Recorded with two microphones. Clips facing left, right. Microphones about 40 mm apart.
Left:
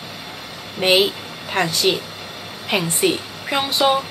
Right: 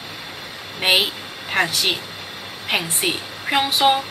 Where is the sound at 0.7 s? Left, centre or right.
Centre.